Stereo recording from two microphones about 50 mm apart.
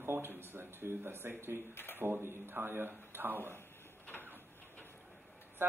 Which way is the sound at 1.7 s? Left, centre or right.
Left.